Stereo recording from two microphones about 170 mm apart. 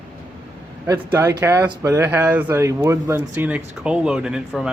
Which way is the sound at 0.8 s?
15° right (ahead or behind).